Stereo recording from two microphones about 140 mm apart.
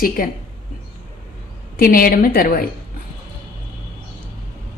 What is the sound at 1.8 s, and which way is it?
Speech, 90° left.